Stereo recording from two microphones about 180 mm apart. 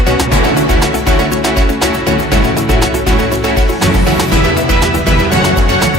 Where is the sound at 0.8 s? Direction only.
Centre (ahead or behind).